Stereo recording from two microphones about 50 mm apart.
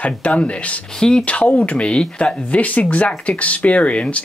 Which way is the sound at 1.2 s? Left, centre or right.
Left.